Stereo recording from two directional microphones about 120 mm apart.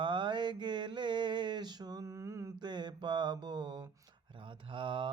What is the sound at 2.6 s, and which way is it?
Mantra, 35° right (ahead or behind).